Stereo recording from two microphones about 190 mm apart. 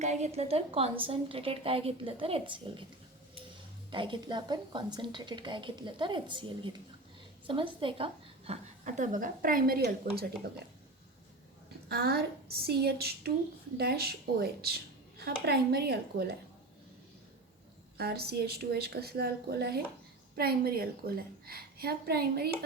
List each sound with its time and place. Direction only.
0.0 s a woman's voice: 35° right (ahead or behind)
3.9 s a woman's voice: 25° right (ahead or behind); by 10.2 s 55° right (ahead or behind)
11.9 s a woman's voice: 55° right (ahead or behind)
17.9 s a woman's voice: 55° right (ahead or behind)